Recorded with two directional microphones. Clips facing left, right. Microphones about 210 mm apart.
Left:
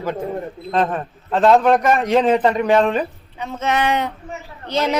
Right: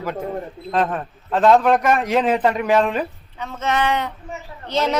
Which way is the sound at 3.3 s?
15° left (ahead or behind).